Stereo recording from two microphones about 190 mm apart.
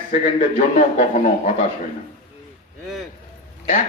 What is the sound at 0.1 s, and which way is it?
Speech, 40° left (ahead or behind).